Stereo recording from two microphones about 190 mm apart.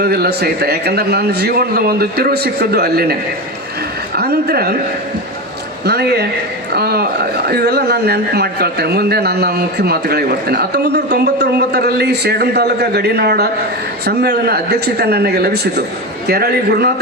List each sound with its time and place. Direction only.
0.0 s speech: 55° right (ahead or behind)
4.2 s speech: 55° right (ahead or behind)
5.8 s speech: 60° right (ahead or behind)